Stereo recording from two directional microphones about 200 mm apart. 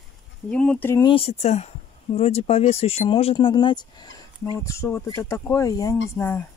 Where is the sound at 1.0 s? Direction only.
30° left (ahead or behind).